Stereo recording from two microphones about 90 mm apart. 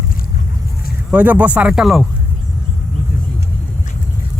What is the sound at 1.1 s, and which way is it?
Speech, 15° right (ahead or behind).